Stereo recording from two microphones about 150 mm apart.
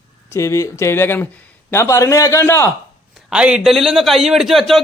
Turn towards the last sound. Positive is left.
turn(degrees=0)  # may be behind; listen again after turning